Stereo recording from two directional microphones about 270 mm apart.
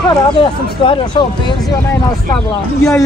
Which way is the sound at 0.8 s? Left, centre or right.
Centre.